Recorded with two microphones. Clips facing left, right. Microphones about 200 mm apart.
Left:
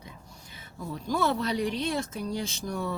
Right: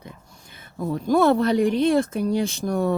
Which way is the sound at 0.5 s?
55° right (ahead or behind).